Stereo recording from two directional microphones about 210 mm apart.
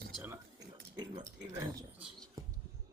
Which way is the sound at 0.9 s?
20° right (ahead or behind).